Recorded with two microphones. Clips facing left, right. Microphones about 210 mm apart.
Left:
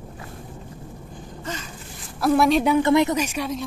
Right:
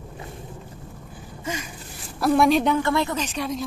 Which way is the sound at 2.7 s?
20° left (ahead or behind).